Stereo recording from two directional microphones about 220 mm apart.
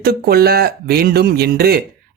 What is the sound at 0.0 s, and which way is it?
Speech, 45° right (ahead or behind).